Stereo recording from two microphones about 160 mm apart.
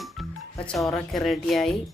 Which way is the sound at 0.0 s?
5° left (ahead or behind).